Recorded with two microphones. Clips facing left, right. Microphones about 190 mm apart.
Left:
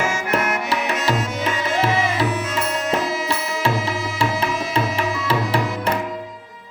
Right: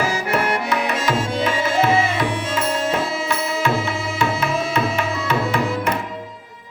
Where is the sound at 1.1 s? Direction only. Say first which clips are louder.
Right 2 dB; 30° right (ahead or behind).